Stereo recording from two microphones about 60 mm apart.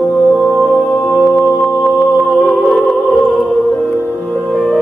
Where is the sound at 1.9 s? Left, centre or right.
Centre.